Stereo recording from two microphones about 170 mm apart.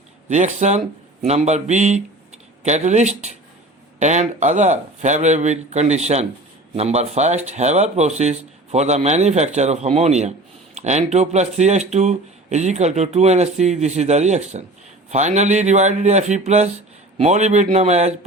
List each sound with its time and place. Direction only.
0.3 s speech: 45° right (ahead or behind)